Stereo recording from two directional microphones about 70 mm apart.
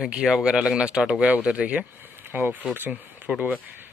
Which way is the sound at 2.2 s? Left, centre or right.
Right.